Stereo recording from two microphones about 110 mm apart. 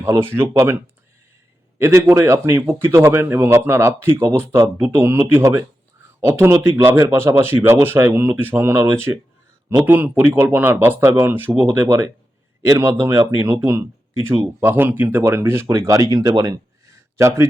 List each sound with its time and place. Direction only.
0.0 s speech: 20° right (ahead or behind)
1.8 s speech: 25° right (ahead or behind)